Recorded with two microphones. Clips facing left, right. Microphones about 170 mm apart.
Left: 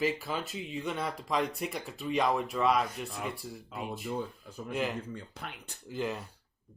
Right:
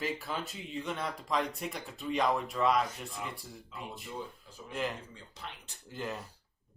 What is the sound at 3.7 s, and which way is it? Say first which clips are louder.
Speech: left 5 dB; 55° left (ahead or behind).